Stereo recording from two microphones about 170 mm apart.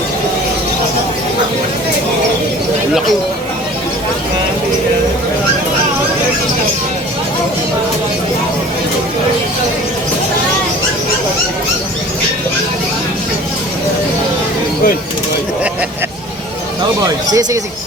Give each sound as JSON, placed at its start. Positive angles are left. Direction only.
{"t": 17.0, "sound": "speech", "side_deg": -20}